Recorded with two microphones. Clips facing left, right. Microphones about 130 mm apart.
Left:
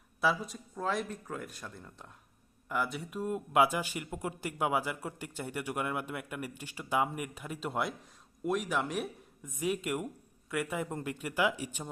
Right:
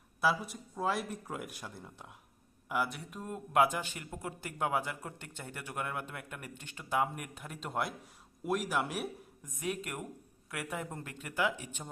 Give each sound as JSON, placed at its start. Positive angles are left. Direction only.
{"t": 0.2, "sound": "speech", "side_deg": -5}
{"t": 10.9, "sound": "speech", "side_deg": 15}